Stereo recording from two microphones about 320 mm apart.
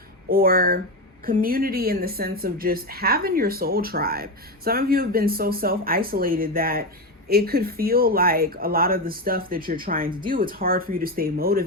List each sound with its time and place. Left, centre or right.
0.3 s a woman's voice: right